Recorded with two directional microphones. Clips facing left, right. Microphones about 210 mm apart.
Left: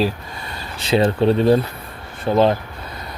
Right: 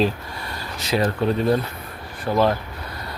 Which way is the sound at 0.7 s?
30° left (ahead or behind).